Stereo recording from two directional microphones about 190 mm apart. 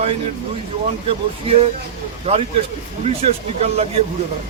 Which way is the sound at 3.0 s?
35° right (ahead or behind).